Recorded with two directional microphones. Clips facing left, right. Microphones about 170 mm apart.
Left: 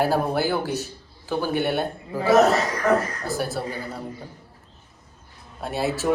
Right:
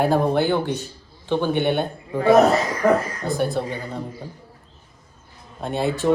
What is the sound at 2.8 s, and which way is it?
Speech, 15° right (ahead or behind).